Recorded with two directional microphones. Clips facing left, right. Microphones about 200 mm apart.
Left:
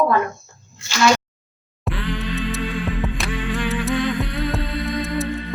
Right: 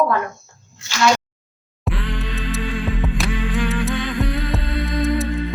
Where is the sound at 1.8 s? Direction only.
Centre (ahead or behind).